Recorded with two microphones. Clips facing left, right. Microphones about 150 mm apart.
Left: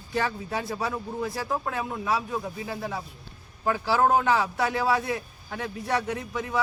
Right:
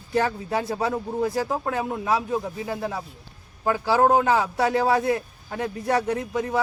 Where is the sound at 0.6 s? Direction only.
30° right (ahead or behind).